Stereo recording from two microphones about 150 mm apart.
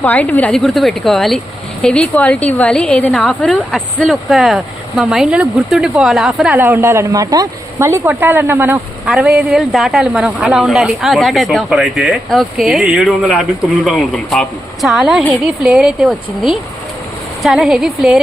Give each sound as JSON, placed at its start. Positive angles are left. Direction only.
{"t": 0.0, "sound": "a woman's voice", "side_deg": 10}
{"t": 9.1, "sound": "a woman's voice", "side_deg": 0}